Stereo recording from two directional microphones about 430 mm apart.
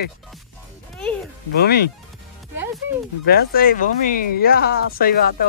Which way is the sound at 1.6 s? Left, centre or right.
Left.